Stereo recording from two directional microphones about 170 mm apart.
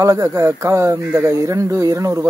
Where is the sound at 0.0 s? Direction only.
20° right (ahead or behind).